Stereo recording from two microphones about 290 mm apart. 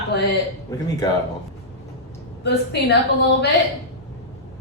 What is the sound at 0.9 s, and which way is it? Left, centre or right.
Speech, centre.